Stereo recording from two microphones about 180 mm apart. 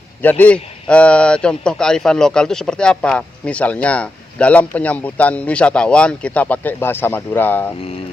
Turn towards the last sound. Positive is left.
turn(degrees=10)  # may be behind; listen again after turning